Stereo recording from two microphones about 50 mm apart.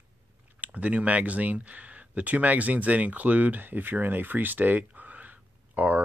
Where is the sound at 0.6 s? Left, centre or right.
Right.